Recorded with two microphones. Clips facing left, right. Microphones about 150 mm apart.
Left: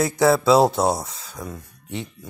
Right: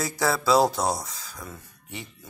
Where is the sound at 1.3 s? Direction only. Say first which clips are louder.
Left 7 dB; 15° left (ahead or behind).